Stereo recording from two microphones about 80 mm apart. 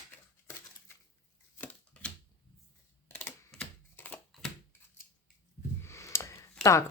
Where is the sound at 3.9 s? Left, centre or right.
Left.